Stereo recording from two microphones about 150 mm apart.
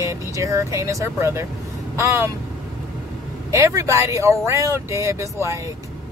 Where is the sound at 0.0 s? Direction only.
20° right (ahead or behind).